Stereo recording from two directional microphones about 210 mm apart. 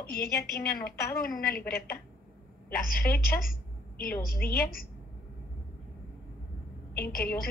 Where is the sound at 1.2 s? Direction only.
45° left (ahead or behind).